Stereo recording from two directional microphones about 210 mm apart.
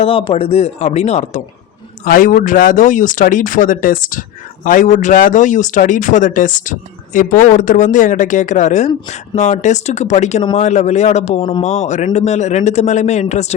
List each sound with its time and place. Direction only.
0.0 s speech: 25° left (ahead or behind)